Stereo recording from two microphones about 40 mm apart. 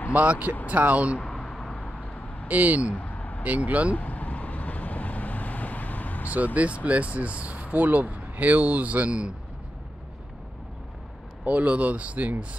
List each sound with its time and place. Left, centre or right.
0.1 s speech: right
1.2 s a sound: centre
1.5 s vehicle: centre
2.4 s speech: right
2.9 s a sound: left
3.4 s speech: right
3.9 s vehicle: left
6.3 s speech: right
11.4 s speech: right